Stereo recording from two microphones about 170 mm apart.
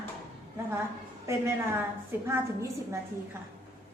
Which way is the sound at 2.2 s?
15° right (ahead or behind).